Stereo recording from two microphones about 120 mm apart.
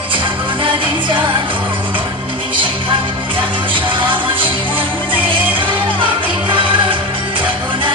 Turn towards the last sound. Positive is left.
turn(degrees=-45)  # may be behind; listen again after turning